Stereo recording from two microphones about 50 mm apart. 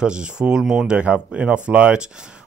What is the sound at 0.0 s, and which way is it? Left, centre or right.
Speech, centre.